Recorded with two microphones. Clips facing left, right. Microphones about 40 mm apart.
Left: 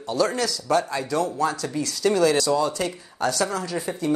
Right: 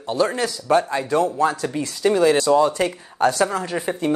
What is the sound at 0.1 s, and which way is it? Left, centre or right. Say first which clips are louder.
Speech: right 2 dB; right.